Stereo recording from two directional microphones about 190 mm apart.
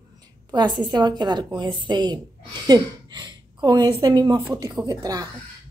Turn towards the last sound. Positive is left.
turn(degrees=-20)  # may be behind; listen again after turning